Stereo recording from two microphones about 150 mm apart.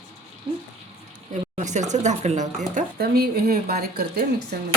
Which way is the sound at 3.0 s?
85° right.